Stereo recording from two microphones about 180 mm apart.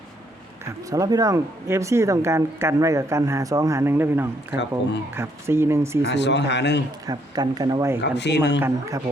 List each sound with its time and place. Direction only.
0.6 s speech: 20° right (ahead or behind)
6.1 s a man's voice: 75° left (ahead or behind)
7.1 s speech: 20° right (ahead or behind)
8.0 s a man's voice: 70° left (ahead or behind)